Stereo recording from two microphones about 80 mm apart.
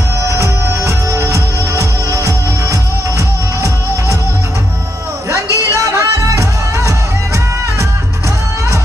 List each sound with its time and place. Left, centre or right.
0.2 s music: right
5.3 s music: right